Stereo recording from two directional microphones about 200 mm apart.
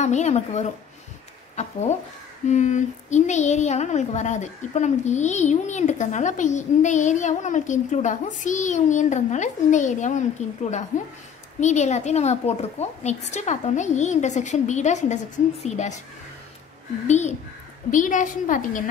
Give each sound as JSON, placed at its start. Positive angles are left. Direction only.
{"t": 0.0, "sound": "speech", "side_deg": 35}
{"t": 17.1, "sound": "speech", "side_deg": 35}